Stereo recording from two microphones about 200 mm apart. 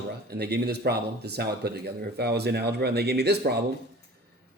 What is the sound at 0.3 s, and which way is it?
A man's voice, 55° right (ahead or behind).